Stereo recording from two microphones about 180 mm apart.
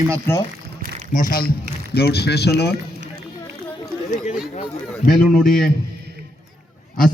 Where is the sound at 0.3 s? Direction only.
10° left (ahead or behind).